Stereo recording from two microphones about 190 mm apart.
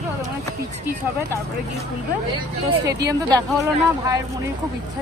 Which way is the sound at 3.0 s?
20° right (ahead or behind).